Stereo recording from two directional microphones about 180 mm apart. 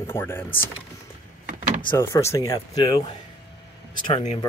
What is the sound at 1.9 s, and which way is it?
Speech, 15° left (ahead or behind).